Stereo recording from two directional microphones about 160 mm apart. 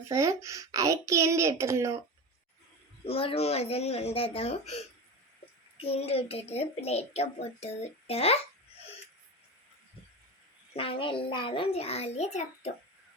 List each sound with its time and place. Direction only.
0.1 s speech: 20° right (ahead or behind)
3.0 s a child's voice: 35° left (ahead or behind)
10.8 s a child's voice: 35° left (ahead or behind)